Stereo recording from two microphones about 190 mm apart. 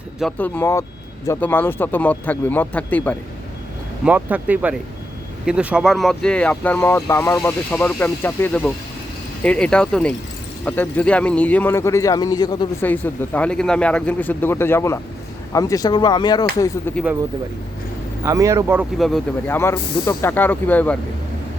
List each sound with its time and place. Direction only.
0.2 s speech: 5° left (ahead or behind)
4.0 s speech: 10° right (ahead or behind); by 12.6 s 20° left (ahead or behind)
12.8 s speech: 10° left (ahead or behind)
18.3 s speech: 15° right (ahead or behind)
18.9 s speech: centre (ahead or behind)
19.5 s speech: 10° left (ahead or behind)